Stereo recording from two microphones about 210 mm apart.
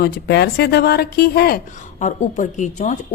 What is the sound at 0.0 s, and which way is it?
Speech, 50° left (ahead or behind).